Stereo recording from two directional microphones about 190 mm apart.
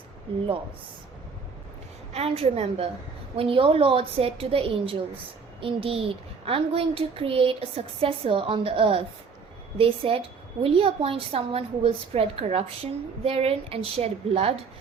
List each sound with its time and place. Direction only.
0.3 s a woman's voice: 30° right (ahead or behind)
2.1 s a woman's voice: 30° right (ahead or behind)